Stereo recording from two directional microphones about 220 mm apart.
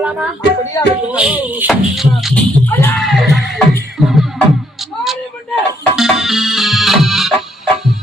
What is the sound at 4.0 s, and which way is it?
Music, centre (ahead or behind).